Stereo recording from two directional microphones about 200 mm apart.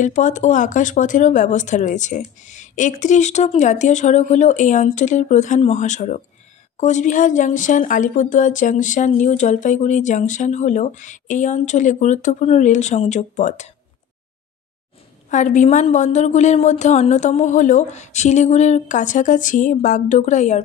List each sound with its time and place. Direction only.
0.0 s speech: 40° left (ahead or behind)
15.2 s speech: 40° left (ahead or behind)